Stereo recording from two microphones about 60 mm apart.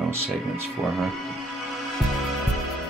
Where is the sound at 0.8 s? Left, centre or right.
Right.